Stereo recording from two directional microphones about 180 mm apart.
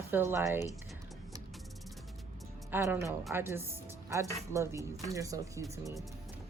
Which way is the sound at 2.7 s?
15° right (ahead or behind).